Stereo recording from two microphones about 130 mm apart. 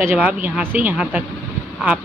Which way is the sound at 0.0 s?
10° right (ahead or behind).